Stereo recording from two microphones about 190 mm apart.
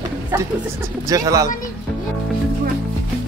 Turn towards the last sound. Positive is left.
turn(degrees=-20)  # may be behind; listen again after turning